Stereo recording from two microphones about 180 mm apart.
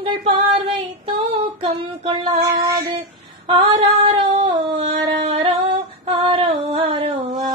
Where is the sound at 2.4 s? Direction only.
20° right (ahead or behind).